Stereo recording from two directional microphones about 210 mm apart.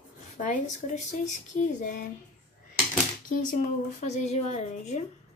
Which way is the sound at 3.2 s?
35° left (ahead or behind).